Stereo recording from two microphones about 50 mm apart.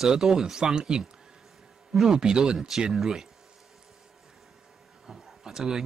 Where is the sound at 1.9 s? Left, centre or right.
Centre.